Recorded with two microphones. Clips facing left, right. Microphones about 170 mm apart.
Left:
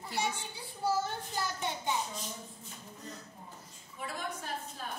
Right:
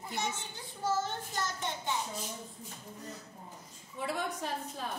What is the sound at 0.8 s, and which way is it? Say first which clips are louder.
A child's voice: left 1 dB; 10° left (ahead or behind).